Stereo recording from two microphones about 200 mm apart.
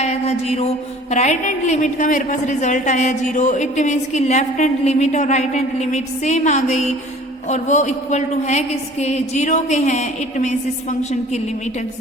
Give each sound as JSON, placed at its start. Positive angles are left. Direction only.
{"t": 0.0, "sound": "a woman's voice", "side_deg": 35}